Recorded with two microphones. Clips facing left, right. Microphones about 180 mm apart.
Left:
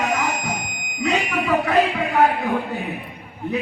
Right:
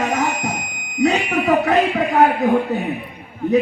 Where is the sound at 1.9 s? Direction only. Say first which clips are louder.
Right 3 dB; 40° right (ahead or behind).